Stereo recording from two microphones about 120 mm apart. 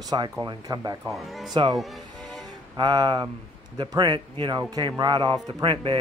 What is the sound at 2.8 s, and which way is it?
Speech, 35° right (ahead or behind).